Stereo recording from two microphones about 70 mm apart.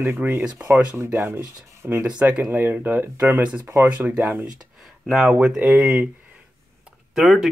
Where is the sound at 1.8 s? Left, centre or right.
Right.